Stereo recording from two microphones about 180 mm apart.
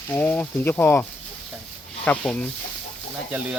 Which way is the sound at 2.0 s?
5° left (ahead or behind).